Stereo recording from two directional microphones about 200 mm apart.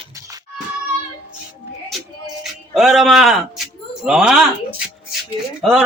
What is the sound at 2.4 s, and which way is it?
Music, centre (ahead or behind).